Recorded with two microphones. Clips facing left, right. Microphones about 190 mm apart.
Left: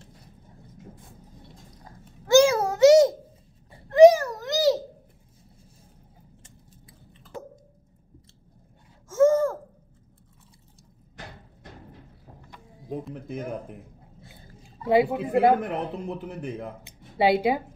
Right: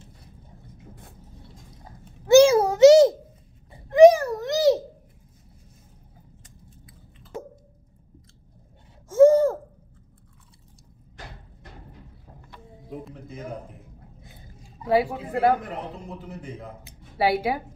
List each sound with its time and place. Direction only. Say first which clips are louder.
1.9 s babbling: right 4 dB; 25° right (ahead or behind)
3.9 s a sound: right 1 dB; 20° right (ahead or behind)
9.1 s gasp: right 4 dB; 30° right (ahead or behind)
14.2 s dog: even; 20° right (ahead or behind)
14.9 s speech: left 2 dB; 20° left (ahead or behind)
15.6 s a man's voice: left 5 dB; 60° left (ahead or behind)
16.8 s a sound: left 2 dB; 20° left (ahead or behind)